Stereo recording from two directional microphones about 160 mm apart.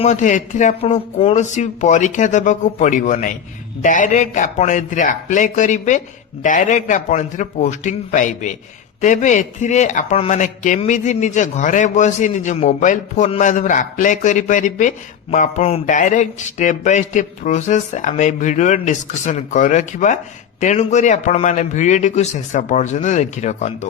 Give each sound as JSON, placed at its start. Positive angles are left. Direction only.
{"t": 0.0, "sound": "a man's voice", "side_deg": 50}